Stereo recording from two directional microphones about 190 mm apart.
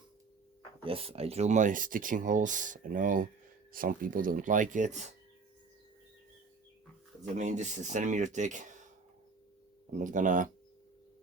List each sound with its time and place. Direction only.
0.9 s speech: 30° right (ahead or behind)
7.3 s speech: 40° right (ahead or behind)
10.0 s speech: 40° right (ahead or behind)